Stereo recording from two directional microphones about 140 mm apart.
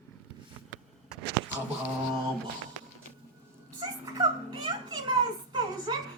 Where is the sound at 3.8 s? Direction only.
30° right (ahead or behind).